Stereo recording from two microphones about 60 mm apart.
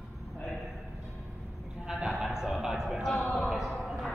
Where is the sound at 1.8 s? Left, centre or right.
Centre.